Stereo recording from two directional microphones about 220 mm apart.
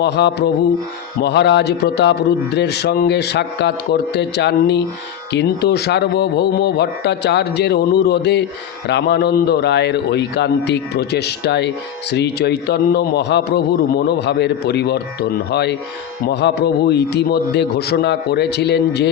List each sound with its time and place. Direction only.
0.0 s a man's voice: 50° left (ahead or behind)